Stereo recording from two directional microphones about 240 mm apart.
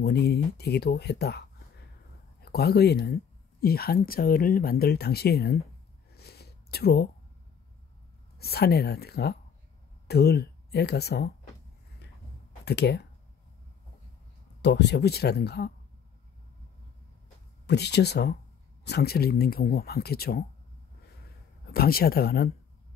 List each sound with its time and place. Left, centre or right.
0.0 s speech: left
2.4 s speech: left
6.1 s a sound: left
8.4 s speech: left
12.6 s speech: left
14.6 s speech: left
17.6 s speech: left
21.7 s speech: left